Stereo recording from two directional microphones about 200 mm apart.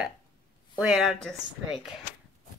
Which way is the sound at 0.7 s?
5° right (ahead or behind).